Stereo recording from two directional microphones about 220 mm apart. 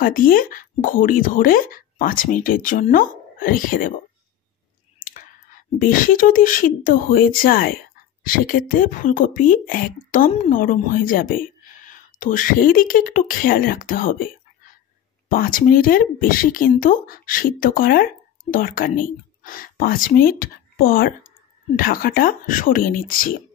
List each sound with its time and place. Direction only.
0.0 s speech: 40° left (ahead or behind)
5.0 s speech: 35° left (ahead or behind)
15.2 s speech: 40° left (ahead or behind)